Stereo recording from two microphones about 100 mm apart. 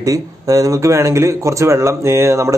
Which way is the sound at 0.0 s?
35° right (ahead or behind).